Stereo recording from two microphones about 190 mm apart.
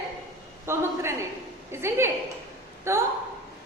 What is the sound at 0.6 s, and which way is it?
A woman's voice, 15° right (ahead or behind).